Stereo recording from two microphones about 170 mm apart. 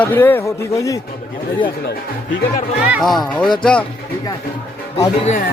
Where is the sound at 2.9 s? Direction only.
Centre (ahead or behind).